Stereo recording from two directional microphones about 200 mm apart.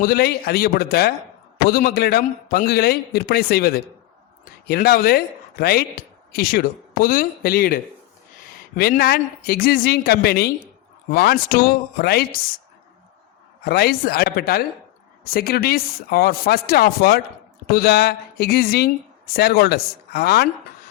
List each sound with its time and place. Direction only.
0.0 s a man's voice: 50° left (ahead or behind)
13.7 s a man's voice: 50° left (ahead or behind)